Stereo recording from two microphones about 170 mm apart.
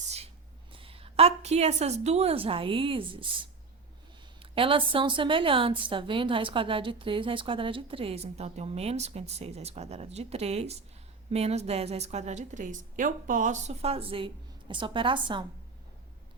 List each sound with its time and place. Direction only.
0.7 s a woman's voice: 30° right (ahead or behind)
4.5 s a woman's voice: 30° right (ahead or behind)